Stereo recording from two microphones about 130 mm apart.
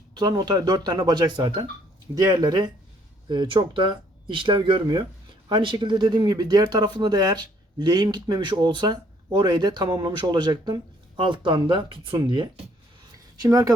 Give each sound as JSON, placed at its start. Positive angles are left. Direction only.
{"t": 0.1, "sound": "speech", "side_deg": -35}
{"t": 13.4, "sound": "speech", "side_deg": -25}